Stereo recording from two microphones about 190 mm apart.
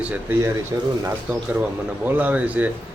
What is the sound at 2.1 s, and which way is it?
Speech, 10° right (ahead or behind).